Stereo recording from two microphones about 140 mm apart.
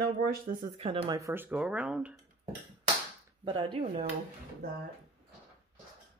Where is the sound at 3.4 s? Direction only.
35° right (ahead or behind).